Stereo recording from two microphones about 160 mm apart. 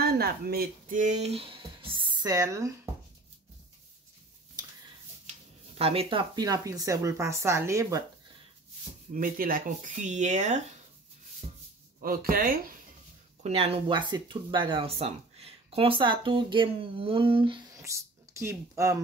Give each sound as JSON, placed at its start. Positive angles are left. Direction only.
{"t": 0.0, "sound": "speech", "side_deg": -70}
{"t": 5.8, "sound": "speech", "side_deg": -35}
{"t": 9.1, "sound": "speech", "side_deg": -60}
{"t": 12.0, "sound": "speech", "side_deg": -65}
{"t": 13.4, "sound": "speech", "side_deg": -40}
{"t": 17.8, "sound": "speech", "side_deg": -20}